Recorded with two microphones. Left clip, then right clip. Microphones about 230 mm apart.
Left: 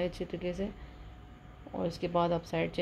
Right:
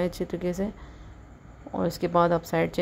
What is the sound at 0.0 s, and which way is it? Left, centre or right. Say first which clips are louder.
Speech: right 6 dB; right.